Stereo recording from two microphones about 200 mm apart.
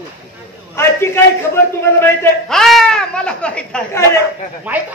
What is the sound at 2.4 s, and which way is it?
Speech, centre (ahead or behind).